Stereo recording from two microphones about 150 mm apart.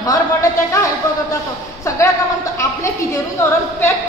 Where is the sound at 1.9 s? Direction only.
20° left (ahead or behind).